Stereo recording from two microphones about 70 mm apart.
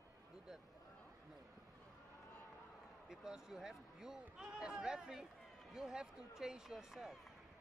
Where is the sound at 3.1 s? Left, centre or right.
Centre.